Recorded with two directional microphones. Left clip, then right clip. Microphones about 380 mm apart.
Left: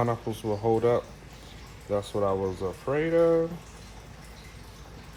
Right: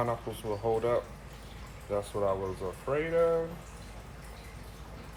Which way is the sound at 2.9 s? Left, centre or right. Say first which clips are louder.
Left 4 dB; left.